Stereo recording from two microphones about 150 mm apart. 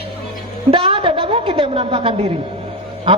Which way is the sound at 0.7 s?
35° right (ahead or behind).